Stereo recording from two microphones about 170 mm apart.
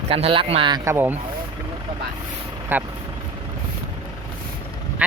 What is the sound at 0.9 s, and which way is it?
Speech, 15° right (ahead or behind).